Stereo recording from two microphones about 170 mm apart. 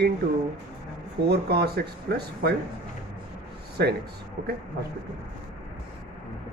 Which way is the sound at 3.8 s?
70° right (ahead or behind).